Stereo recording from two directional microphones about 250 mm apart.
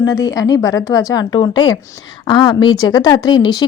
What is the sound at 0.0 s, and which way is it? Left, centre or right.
Speech, centre.